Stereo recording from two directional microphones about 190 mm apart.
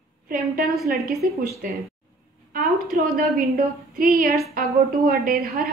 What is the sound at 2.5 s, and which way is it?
A woman's voice, 50° right (ahead or behind).